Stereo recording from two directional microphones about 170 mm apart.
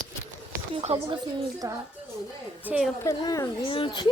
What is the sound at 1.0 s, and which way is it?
Speech, 20° right (ahead or behind).